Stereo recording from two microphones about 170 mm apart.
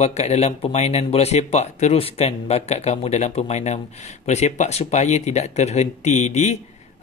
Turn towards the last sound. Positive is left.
turn(degrees=40)  # may be behind; listen again after turning